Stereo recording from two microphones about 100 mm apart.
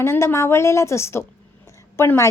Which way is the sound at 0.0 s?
25° left (ahead or behind).